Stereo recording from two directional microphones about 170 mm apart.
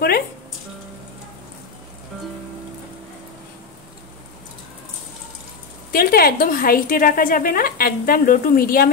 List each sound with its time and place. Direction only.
5.9 s speech: 60° left (ahead or behind)